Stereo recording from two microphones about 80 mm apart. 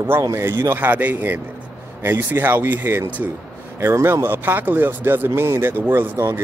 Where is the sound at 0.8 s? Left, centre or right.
Right.